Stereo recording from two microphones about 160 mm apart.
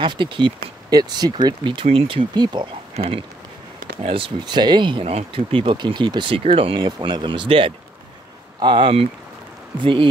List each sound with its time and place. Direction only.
0.0 s speech: 30° right (ahead or behind)